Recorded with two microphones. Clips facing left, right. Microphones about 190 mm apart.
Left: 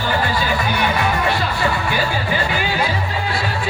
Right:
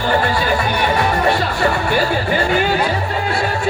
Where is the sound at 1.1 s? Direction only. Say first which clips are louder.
Right 3 dB; 45° right (ahead or behind).